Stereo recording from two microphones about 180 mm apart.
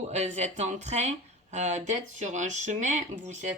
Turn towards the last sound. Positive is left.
turn(degrees=-40)  # may be behind; listen again after turning